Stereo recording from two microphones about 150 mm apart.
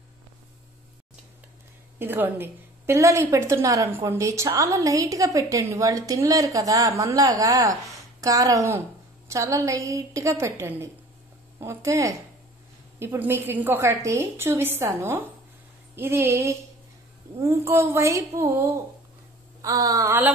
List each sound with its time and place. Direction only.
2.0 s a woman's voice: 15° right (ahead or behind)
17.6 s a woman's voice: 20° right (ahead or behind)